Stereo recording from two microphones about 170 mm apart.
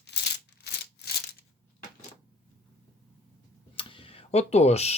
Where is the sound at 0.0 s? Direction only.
80° left.